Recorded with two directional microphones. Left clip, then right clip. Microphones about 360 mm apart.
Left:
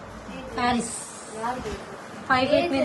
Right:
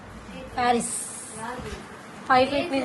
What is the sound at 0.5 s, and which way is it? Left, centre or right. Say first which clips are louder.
Speech: right 2 dB; centre.